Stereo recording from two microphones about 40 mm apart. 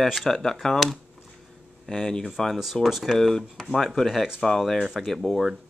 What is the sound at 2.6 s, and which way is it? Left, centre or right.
Speech, centre.